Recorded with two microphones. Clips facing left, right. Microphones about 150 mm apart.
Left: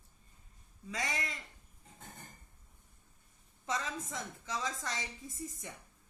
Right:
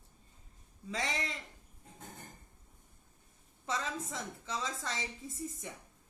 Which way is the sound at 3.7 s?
25° right (ahead or behind).